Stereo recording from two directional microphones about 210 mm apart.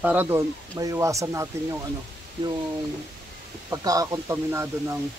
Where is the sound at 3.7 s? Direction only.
15° right (ahead or behind).